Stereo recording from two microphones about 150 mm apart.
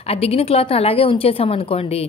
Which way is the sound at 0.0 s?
40° left (ahead or behind).